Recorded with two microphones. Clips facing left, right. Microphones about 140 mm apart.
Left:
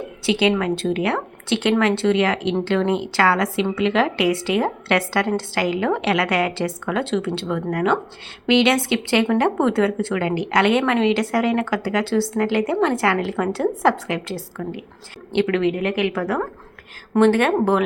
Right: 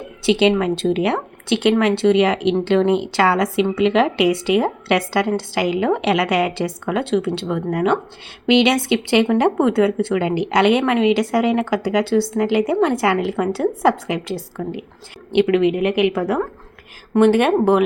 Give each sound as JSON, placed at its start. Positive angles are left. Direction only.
{"t": 0.3, "sound": "speech", "side_deg": -20}